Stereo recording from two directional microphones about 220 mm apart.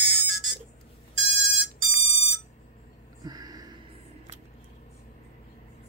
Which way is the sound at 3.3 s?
15° right (ahead or behind).